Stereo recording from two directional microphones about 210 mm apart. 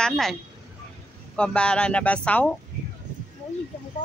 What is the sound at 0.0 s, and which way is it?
Speech, centre (ahead or behind).